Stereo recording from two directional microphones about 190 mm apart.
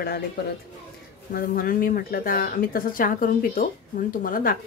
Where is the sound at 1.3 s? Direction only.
50° left (ahead or behind).